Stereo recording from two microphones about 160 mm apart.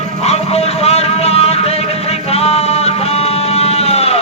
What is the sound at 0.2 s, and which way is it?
Music, 40° left (ahead or behind).